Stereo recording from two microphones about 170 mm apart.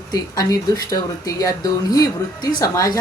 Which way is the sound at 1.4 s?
20° left (ahead or behind).